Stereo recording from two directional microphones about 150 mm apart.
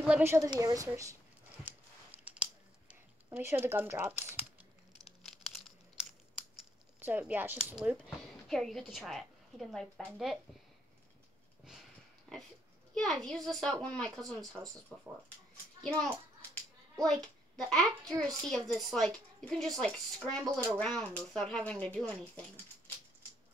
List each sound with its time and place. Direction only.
0.0 s a woman's voice: 5° right (ahead or behind)
0.3 s a woman's voice: 20° right (ahead or behind)
2.0 s scissors: 10° right (ahead or behind)
3.3 s speech: 15° right (ahead or behind)
5.2 s crumpling: centre (ahead or behind)
7.0 s a woman's voice: 10° right (ahead or behind)
12.3 s a woman's voice: 5° left (ahead or behind)